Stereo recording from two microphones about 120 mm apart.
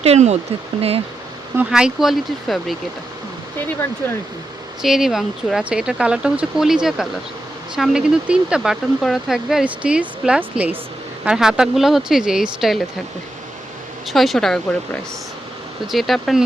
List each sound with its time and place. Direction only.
0.0 s speech: 65° right (ahead or behind)
0.8 s speech: 55° right (ahead or behind)
1.7 s speech: 5° right (ahead or behind)
4.8 s speech: 5° right (ahead or behind)
14.1 s speech: centre (ahead or behind)
15.9 s speech: centre (ahead or behind)